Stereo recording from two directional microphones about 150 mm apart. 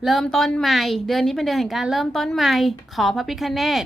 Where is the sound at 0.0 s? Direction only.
Centre (ahead or behind).